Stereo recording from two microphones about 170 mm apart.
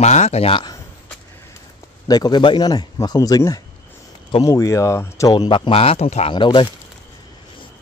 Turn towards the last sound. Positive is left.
turn(degrees=25)  # may be behind; listen again after turning